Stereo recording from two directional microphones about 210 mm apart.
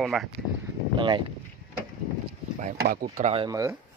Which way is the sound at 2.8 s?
45° right (ahead or behind).